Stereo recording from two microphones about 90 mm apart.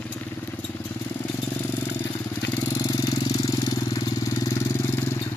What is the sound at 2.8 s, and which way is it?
Engine, 50° left (ahead or behind).